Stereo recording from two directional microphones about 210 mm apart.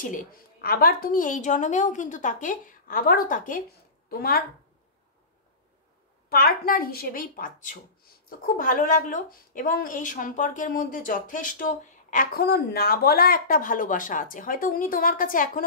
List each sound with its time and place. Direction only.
0.0 s a woman's voice: 40° left (ahead or behind)
6.2 s a woman's voice: 45° left (ahead or behind)